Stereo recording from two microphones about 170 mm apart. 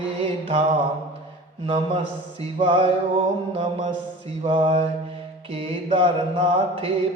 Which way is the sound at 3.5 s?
30° right (ahead or behind).